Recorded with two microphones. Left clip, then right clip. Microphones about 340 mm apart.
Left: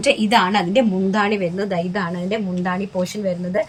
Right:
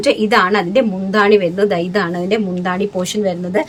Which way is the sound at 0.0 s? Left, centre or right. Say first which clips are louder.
Right 3 dB; centre.